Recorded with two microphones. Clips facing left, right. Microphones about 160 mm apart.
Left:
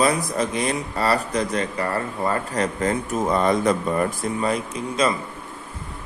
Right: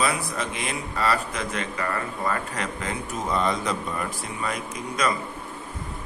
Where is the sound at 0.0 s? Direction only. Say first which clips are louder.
Left 6 dB; 40° left (ahead or behind).